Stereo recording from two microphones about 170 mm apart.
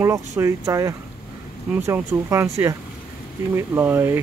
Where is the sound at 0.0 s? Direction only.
15° right (ahead or behind).